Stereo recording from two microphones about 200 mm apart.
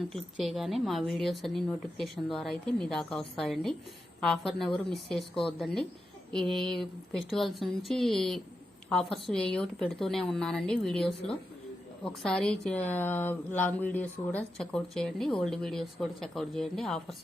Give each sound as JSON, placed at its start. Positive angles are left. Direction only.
{"t": 0.1, "sound": "speech", "side_deg": 0}